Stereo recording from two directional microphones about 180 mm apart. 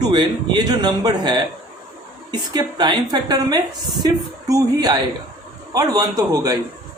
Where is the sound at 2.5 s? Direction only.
25° right (ahead or behind).